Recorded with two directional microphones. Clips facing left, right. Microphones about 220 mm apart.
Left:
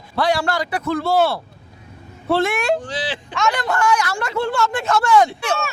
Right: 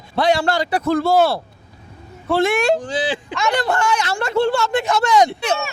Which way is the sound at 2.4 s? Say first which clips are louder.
Right 6 dB; 25° right (ahead or behind).